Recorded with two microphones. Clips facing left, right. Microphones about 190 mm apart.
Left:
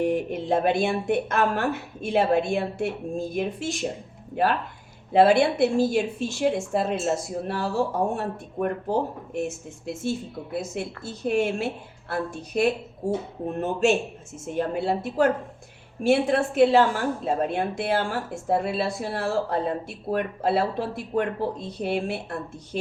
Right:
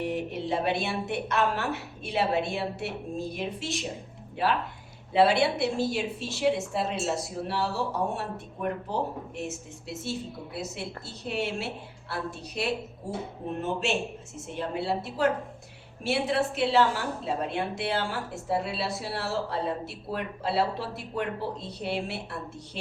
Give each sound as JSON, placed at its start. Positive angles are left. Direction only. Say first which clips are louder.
{"t": 0.0, "sound": "a woman's voice", "louder": "left 6 dB", "side_deg": 50}